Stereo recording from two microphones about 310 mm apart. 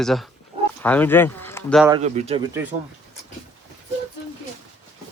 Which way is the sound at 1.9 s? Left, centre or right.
Right.